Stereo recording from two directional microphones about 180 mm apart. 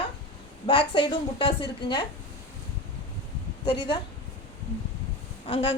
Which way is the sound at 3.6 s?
30° left (ahead or behind).